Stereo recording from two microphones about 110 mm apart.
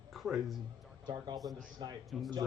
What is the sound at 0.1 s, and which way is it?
Speech, centre (ahead or behind).